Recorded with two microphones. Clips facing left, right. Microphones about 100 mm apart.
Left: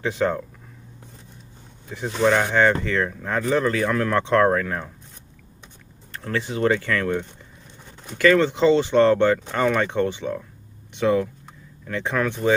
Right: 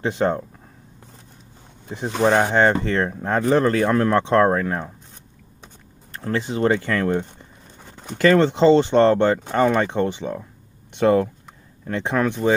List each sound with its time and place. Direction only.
0.0 s speech: 30° right (ahead or behind)
1.9 s speech: 25° right (ahead or behind)
6.2 s speech: 25° right (ahead or behind)
11.0 s speech: 45° right (ahead or behind)
11.9 s speech: 25° right (ahead or behind)